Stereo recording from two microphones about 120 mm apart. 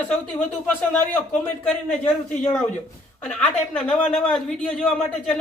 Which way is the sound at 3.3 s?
10° left (ahead or behind).